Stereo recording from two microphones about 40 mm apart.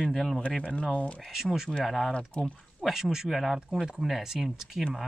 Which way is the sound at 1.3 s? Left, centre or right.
Centre.